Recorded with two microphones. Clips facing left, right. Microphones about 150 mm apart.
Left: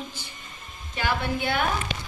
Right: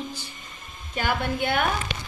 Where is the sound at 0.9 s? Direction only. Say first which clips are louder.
Right 1 dB; 50° right (ahead or behind).